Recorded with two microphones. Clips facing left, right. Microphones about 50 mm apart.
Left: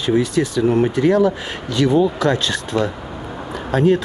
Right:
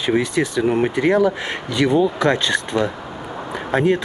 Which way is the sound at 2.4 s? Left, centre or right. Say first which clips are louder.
Right 1 dB; centre.